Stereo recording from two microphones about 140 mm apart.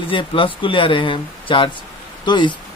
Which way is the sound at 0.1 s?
40° left (ahead or behind).